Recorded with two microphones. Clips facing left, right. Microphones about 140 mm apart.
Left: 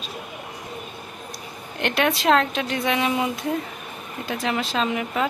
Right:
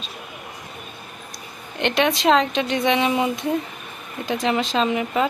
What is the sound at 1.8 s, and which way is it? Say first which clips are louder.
Speech: right 2 dB; 5° left (ahead or behind).